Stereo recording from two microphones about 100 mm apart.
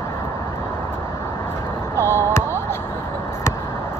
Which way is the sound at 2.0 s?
25° left (ahead or behind).